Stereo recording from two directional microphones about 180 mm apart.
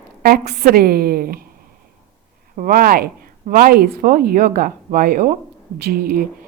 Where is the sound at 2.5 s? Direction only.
50° right (ahead or behind).